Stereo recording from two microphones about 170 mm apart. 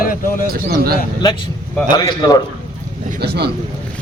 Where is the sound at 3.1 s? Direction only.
70° right (ahead or behind).